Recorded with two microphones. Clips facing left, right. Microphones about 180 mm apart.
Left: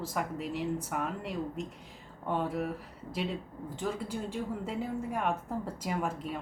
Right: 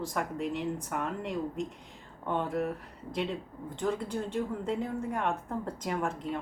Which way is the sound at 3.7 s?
5° left (ahead or behind).